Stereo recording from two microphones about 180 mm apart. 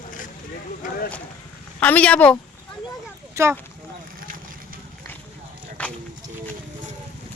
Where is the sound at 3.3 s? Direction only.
15° right (ahead or behind).